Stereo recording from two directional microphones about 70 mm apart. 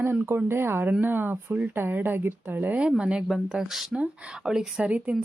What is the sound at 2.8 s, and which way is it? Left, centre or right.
Speech, centre.